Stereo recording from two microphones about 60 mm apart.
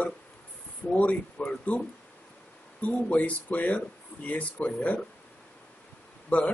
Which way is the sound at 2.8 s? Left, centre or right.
Left.